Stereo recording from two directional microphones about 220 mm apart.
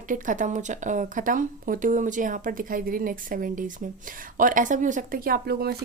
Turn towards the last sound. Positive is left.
turn(degrees=-45)  # may be behind; listen again after turning